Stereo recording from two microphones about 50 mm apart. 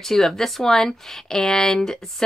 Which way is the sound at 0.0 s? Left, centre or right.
Centre.